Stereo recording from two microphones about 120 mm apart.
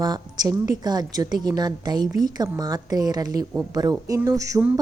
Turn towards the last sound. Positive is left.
turn(degrees=-25)  # may be behind; listen again after turning